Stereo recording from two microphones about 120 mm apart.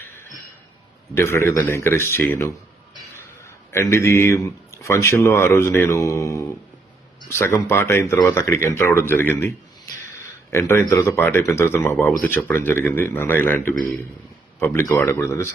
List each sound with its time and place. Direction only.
1.1 s speech: 20° left (ahead or behind)
10.5 s a man's voice: 20° left (ahead or behind)